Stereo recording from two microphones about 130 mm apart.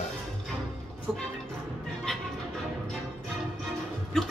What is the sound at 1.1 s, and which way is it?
Music, centre (ahead or behind).